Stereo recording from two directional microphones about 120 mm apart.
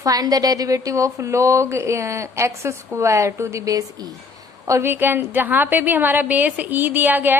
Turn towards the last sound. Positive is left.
turn(degrees=-15)  # may be behind; listen again after turning